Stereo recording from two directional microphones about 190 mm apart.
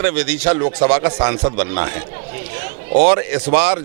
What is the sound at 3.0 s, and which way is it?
Speech, 15° right (ahead or behind).